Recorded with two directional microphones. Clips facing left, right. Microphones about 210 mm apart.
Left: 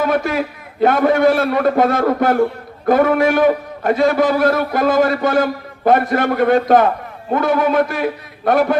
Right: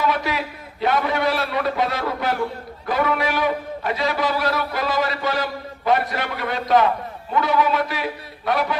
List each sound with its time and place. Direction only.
0.0 s a man's voice: 50° left (ahead or behind)